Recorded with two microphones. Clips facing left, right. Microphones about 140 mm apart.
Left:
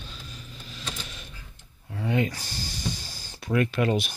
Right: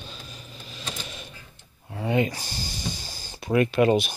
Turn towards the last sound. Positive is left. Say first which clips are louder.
# right 4 dB
turn(degrees=-10)  # may be behind; listen again after turning